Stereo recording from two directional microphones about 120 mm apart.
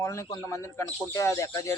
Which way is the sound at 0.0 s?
25° left (ahead or behind).